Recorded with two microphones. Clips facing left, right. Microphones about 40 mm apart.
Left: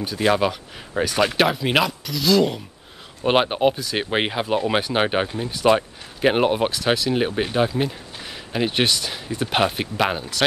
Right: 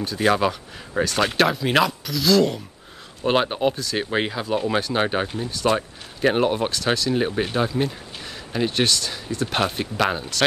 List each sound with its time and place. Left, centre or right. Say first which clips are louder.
0.0 s speech: even; centre
3.3 s speech: left 2 dB; left
6.7 s speech: left 1 dB; centre